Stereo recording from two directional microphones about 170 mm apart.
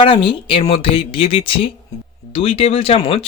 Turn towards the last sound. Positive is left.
turn(degrees=35)  # may be behind; listen again after turning